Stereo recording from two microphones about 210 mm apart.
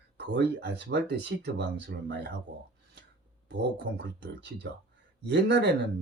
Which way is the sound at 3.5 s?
55° right (ahead or behind).